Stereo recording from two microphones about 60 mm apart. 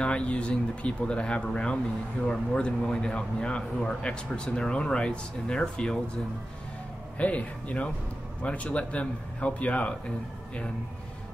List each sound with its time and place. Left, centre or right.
0.0 s speech: centre
7.2 s speech: left